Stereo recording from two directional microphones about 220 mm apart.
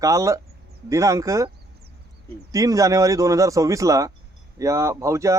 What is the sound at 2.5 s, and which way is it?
Speech, 15° right (ahead or behind).